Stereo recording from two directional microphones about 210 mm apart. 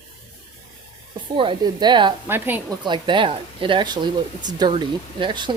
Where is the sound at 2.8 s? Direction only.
20° right (ahead or behind).